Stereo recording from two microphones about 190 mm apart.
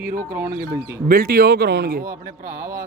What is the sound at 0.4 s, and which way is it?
A man's voice, 50° right (ahead or behind).